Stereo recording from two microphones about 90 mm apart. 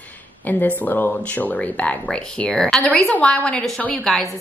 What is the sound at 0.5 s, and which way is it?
Speech, 20° left (ahead or behind).